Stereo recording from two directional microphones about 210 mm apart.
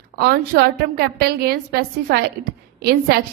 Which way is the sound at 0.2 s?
50° right (ahead or behind).